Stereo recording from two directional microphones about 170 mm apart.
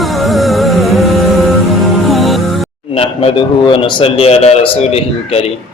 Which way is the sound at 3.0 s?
30° left (ahead or behind).